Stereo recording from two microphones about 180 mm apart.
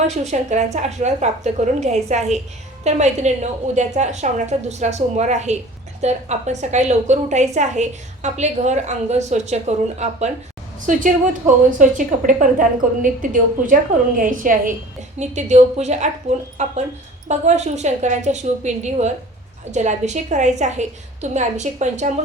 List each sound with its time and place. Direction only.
0.1 s a woman's voice: 40° right (ahead or behind)